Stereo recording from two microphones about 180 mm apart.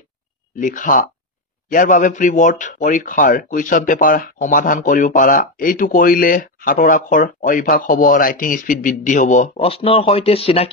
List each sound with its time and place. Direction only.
0.6 s speech: 45° left (ahead or behind)